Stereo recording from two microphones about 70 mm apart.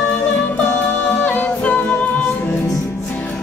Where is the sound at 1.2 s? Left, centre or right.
Left.